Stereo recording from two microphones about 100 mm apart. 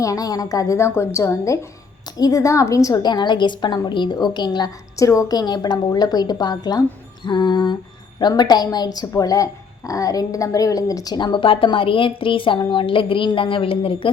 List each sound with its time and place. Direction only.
0.0 s a woman's voice: 35° left (ahead or behind); by 14.1 s 65° left (ahead or behind)